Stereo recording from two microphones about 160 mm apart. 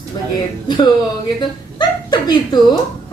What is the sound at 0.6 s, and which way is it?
Speech, 30° left (ahead or behind).